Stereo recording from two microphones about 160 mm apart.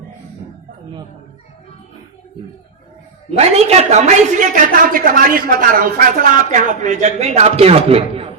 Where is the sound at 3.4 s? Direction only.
40° right (ahead or behind).